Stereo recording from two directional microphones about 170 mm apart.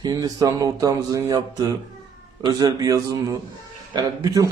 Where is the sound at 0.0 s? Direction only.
20° right (ahead or behind).